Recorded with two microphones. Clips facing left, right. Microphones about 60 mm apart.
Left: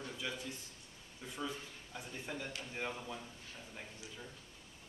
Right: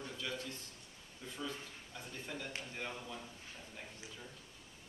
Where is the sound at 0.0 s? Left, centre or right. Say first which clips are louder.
Even; centre.